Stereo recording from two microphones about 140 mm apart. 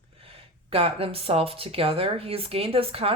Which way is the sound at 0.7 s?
45° right (ahead or behind).